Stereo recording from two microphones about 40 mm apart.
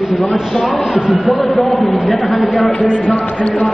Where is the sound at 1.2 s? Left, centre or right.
Centre.